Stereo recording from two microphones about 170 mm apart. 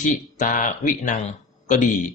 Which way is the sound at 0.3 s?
50° left (ahead or behind).